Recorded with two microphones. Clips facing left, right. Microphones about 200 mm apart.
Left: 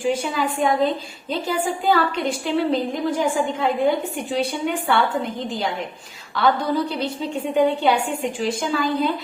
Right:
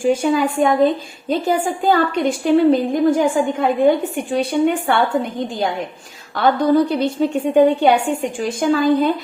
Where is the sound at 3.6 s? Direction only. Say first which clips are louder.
Right 6 dB; 50° right (ahead or behind).